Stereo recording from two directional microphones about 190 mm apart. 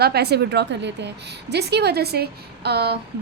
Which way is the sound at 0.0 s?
60° right (ahead or behind).